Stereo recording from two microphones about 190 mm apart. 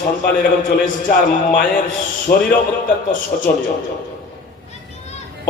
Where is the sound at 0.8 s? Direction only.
45° left (ahead or behind).